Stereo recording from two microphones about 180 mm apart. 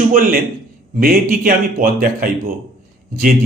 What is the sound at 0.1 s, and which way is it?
A man's voice, 50° right (ahead or behind).